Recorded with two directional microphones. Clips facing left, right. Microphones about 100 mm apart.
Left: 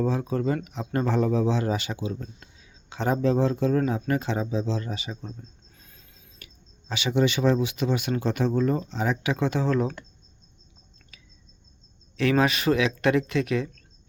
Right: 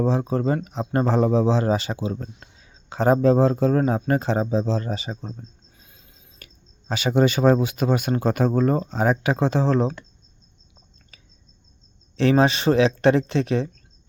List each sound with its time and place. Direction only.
0.0 s speech: 30° right (ahead or behind)
5.7 s a sound: 10° right (ahead or behind)
6.4 s speech: 40° right (ahead or behind)
11.1 s cricket: 35° right (ahead or behind)
12.1 s speech: 30° right (ahead or behind)